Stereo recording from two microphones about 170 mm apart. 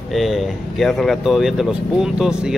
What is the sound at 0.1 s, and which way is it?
Speech, centre (ahead or behind).